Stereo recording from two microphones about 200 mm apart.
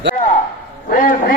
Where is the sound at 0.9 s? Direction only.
40° left (ahead or behind).